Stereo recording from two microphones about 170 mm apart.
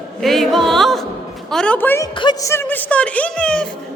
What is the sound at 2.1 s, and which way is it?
Speech, 25° left (ahead or behind).